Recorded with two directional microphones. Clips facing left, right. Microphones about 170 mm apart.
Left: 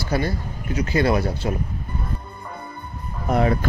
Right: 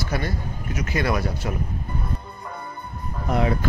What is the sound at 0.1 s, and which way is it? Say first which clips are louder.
Speech: left 6 dB; 30° left (ahead or behind).